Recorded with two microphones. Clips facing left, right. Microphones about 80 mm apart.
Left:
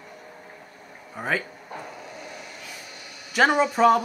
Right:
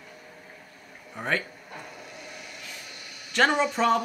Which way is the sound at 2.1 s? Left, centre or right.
Left.